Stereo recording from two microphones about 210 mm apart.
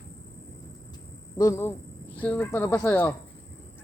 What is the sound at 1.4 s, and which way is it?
Speech, 15° left (ahead or behind).